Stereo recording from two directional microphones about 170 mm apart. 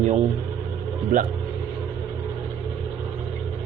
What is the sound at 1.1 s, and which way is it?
Speech, 55° right (ahead or behind).